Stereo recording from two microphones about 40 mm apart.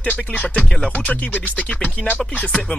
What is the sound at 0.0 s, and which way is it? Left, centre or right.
Speech, left.